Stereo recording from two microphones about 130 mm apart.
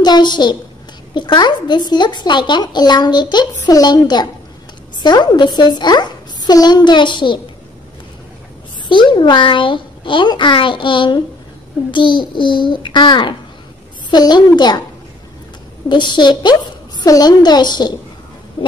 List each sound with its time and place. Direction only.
0.0 s a woman's voice: 35° left (ahead or behind)
8.8 s speech: 35° left (ahead or behind)
15.9 s speech: 35° left (ahead or behind)